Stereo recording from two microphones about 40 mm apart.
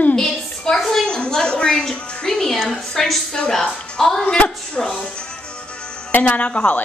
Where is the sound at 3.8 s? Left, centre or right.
Left.